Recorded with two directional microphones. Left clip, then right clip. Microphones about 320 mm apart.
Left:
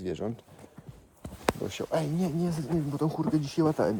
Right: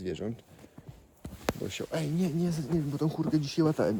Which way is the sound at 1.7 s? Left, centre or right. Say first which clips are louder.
Left 4 dB; centre.